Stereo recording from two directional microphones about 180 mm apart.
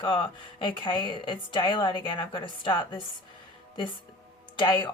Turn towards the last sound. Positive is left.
turn(degrees=25)  # may be behind; listen again after turning